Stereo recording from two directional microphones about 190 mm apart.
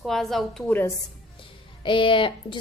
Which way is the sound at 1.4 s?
25° left (ahead or behind).